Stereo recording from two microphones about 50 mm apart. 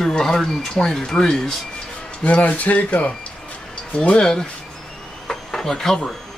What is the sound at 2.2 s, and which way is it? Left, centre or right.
Speech, left.